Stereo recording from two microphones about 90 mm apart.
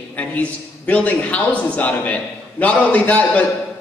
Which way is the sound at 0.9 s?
15° left (ahead or behind).